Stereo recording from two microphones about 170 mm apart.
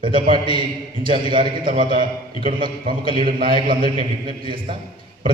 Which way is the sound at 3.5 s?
30° right (ahead or behind).